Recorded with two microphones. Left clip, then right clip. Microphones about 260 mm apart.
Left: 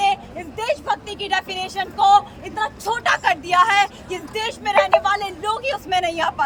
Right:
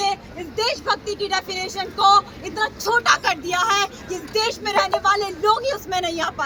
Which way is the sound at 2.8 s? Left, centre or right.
Centre.